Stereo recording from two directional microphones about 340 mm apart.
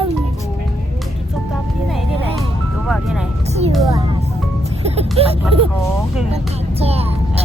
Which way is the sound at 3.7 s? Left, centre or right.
Centre.